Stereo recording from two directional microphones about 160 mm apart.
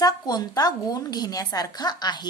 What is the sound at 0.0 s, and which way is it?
A woman's voice, 25° left (ahead or behind).